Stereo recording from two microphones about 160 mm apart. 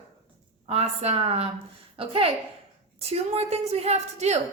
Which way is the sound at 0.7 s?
40° right (ahead or behind).